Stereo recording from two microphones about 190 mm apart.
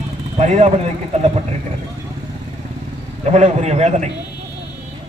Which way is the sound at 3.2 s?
35° right (ahead or behind).